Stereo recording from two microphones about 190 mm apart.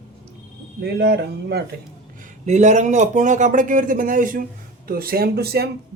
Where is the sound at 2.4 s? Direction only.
35° right (ahead or behind); by 5.7 s 55° right (ahead or behind).